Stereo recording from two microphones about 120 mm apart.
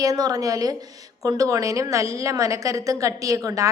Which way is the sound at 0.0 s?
30° right (ahead or behind).